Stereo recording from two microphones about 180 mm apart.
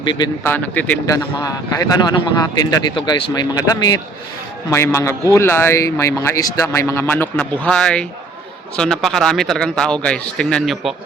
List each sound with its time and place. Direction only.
0.0 s speech: 25° left (ahead or behind)
0.4 s a man's voice: 10° left (ahead or behind)